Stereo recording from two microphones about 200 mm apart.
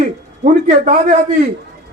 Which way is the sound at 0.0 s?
40° right (ahead or behind).